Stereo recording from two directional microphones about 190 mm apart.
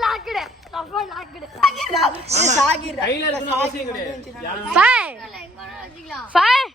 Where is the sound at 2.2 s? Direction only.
35° right (ahead or behind).